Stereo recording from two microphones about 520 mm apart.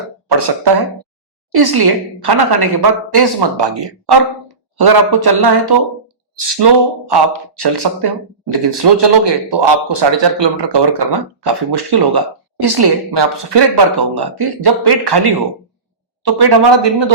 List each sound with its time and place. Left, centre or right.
0.3 s speech: right